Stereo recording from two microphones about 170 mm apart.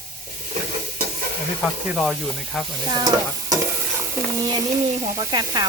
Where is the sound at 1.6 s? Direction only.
Centre (ahead or behind).